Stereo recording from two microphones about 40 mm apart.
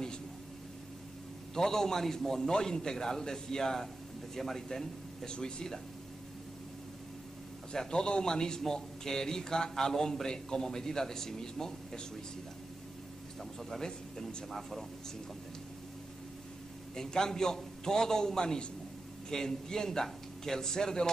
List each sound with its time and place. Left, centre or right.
1.5 s speech: centre
7.7 s speech: centre
13.4 s speech: centre
16.9 s speech: centre